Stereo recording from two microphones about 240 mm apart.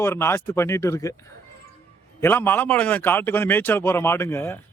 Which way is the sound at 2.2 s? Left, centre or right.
Centre.